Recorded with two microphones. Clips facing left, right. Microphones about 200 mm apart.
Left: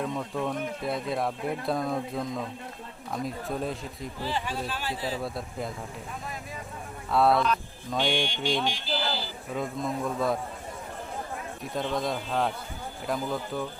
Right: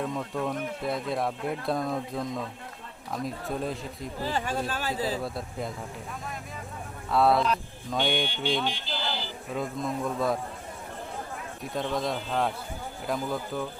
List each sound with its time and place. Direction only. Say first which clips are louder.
0.0 s speech: even; centre (ahead or behind)
4.2 s speech: right 2 dB; 45° right (ahead or behind)
5.2 s speech: even; centre (ahead or behind)
7.1 s speech: even; centre (ahead or behind)
11.6 s speech: even; centre (ahead or behind)